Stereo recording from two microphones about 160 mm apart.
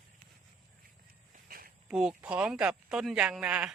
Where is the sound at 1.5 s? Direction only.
65° right (ahead or behind).